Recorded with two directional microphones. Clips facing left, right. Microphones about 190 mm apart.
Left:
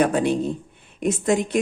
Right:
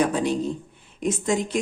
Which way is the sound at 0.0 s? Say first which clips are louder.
Left 3 dB; 60° left (ahead or behind).